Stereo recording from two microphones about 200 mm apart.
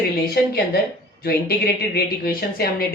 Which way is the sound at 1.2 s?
50° left (ahead or behind).